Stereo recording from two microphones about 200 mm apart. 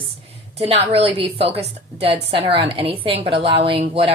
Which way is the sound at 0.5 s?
30° right (ahead or behind).